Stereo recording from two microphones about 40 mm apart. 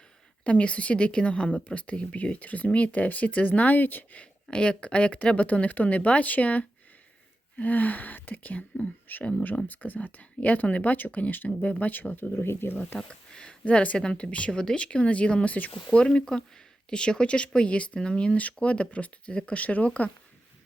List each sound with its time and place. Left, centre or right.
0.4 s speech: left
3.8 s speech: left
4.5 s speech: left
11.4 s speech: left
12.3 s speech: left
13.3 s speech: centre
13.7 s speech: left
15.5 s speech: left
16.0 s speech: left